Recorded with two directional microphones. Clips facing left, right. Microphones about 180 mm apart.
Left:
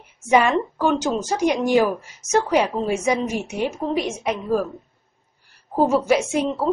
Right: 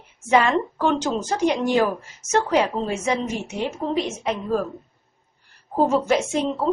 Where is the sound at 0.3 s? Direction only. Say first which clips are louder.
Left 1 dB; 10° left (ahead or behind).